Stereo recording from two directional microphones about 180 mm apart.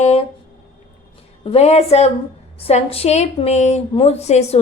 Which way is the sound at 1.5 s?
35° left (ahead or behind).